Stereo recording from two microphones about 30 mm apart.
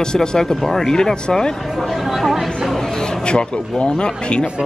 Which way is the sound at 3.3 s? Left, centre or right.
Left.